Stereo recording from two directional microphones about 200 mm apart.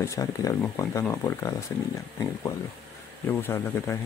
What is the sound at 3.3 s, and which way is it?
Speech, 10° left (ahead or behind).